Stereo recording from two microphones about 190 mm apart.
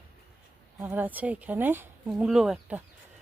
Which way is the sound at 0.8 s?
10° right (ahead or behind).